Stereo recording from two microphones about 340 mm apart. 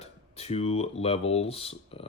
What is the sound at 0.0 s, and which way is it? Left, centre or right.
Speech, centre.